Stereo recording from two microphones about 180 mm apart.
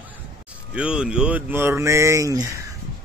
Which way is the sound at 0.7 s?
5° right (ahead or behind).